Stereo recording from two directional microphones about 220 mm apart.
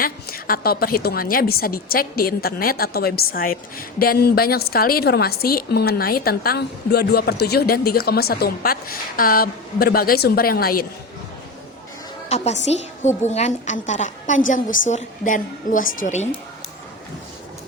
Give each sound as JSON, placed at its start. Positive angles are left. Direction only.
{"t": 0.0, "sound": "a woman's voice", "side_deg": 40}
{"t": 12.3, "sound": "a woman's voice", "side_deg": 30}